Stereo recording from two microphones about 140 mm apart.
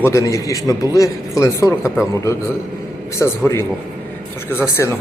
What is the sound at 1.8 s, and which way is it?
Speech, 5° right (ahead or behind).